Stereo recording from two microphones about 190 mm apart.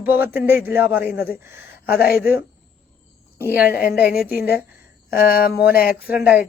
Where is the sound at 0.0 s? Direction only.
10° right (ahead or behind).